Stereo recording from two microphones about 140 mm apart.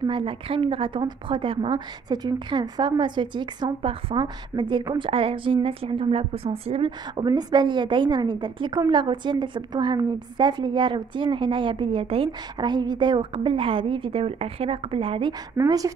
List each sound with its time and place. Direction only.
0.0 s a woman's voice: 40° right (ahead or behind)
15.5 s speech: 25° right (ahead or behind)